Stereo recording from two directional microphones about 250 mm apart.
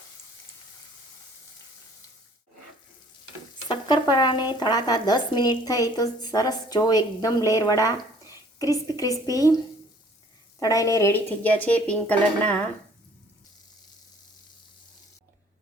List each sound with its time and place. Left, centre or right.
3.7 s speech: centre
10.6 s speech: centre